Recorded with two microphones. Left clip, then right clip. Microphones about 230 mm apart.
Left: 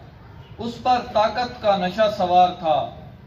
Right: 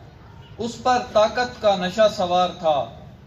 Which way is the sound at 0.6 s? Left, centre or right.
Right.